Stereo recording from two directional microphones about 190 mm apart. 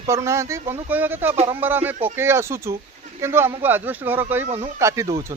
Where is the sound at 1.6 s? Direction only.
10° right (ahead or behind).